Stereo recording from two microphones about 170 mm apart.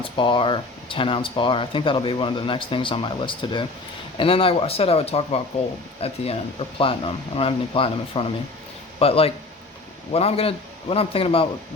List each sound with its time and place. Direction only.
0.0 s speech: 30° left (ahead or behind)